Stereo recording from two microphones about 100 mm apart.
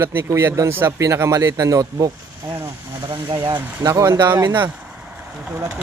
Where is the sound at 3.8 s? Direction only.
35° right (ahead or behind).